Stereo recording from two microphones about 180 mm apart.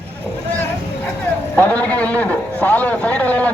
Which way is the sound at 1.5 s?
10° left (ahead or behind).